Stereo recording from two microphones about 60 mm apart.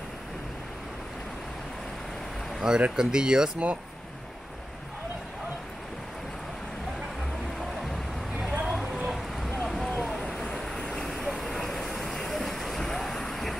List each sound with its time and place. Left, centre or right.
2.6 s speech: centre
8.6 s a sound: centre
11.2 s vehicle: centre